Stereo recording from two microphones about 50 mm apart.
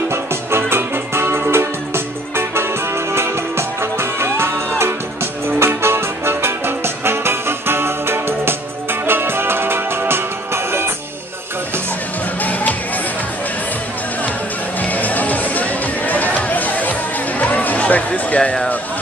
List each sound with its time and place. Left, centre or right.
0.1 s music: right
12.4 s music: left
14.8 s music: left